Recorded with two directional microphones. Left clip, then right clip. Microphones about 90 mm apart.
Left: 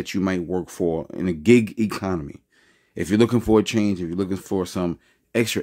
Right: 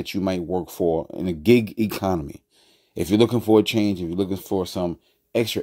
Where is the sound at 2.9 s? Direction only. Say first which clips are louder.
Right 2 dB; 30° right (ahead or behind).